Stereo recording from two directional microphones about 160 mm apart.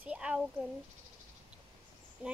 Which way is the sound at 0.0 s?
10° right (ahead or behind).